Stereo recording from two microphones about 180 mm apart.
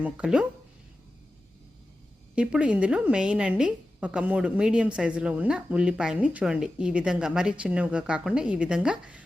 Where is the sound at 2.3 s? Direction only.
5° right (ahead or behind).